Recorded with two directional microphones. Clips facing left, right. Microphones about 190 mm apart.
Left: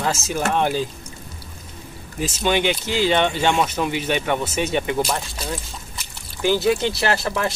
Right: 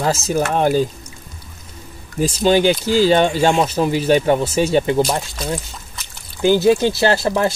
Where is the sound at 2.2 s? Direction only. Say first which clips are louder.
Right 6 dB; 35° right (ahead or behind).